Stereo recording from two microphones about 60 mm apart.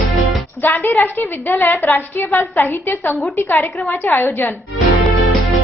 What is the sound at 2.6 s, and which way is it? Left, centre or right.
A woman's voice, left.